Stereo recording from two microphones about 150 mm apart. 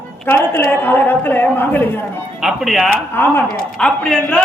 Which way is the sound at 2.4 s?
Centre (ahead or behind).